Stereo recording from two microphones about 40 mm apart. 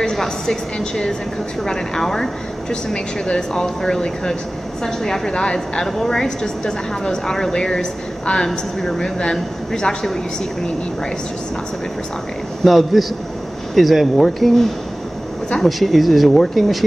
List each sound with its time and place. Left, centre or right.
0.0 s a woman's voice: centre
12.6 s speech: centre